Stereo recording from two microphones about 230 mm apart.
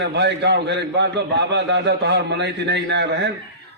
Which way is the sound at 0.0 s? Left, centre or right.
Right.